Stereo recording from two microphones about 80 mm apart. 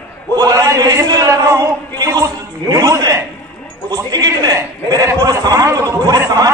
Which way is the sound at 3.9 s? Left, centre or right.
Right.